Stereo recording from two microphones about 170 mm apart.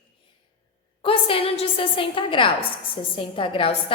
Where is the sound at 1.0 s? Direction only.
30° left (ahead or behind).